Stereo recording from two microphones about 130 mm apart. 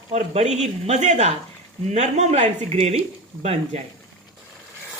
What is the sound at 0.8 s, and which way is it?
Speech, 65° right (ahead or behind).